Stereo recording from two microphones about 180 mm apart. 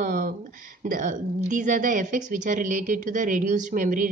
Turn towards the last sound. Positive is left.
turn(degrees=-45)  # may be behind; listen again after turning